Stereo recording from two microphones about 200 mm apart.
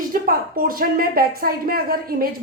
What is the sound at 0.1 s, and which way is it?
A woman's voice, 45° right (ahead or behind).